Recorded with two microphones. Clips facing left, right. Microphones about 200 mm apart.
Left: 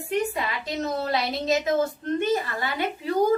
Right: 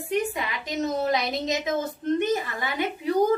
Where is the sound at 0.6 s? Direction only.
15° right (ahead or behind).